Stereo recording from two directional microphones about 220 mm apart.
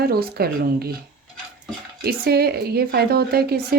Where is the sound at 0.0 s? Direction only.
45° right (ahead or behind).